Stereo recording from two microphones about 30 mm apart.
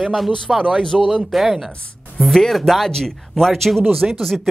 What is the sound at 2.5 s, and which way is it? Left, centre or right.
Speech, centre.